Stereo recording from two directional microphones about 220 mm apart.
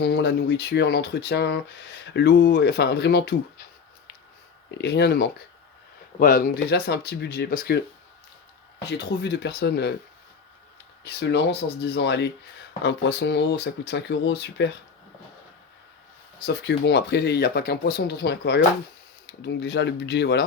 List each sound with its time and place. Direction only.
0.0 s speech: 50° left (ahead or behind)
4.8 s speech: 50° left (ahead or behind)
8.9 s speech: 50° left (ahead or behind)
11.0 s speech: 50° left (ahead or behind)
16.5 s speech: 50° left (ahead or behind)